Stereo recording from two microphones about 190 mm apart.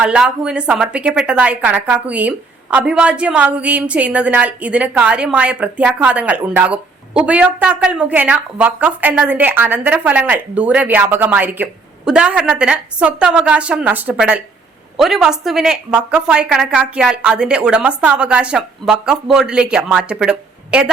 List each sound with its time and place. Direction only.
0.0 s a woman's voice: 5° right (ahead or behind)